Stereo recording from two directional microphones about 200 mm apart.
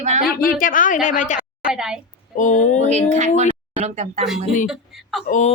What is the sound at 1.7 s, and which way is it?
Speech, 5° right (ahead or behind).